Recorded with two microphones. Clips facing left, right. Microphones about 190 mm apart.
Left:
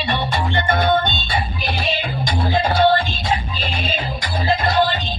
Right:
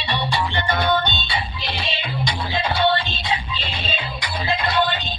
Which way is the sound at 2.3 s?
45° left (ahead or behind).